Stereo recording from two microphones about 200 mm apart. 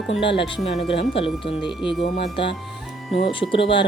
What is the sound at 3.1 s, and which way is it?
Speech, 25° left (ahead or behind).